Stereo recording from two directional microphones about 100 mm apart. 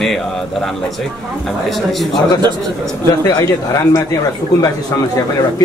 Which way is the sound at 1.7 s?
Centre (ahead or behind).